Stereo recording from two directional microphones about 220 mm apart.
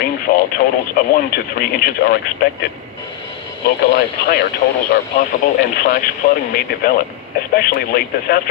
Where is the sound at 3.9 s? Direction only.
45° left (ahead or behind).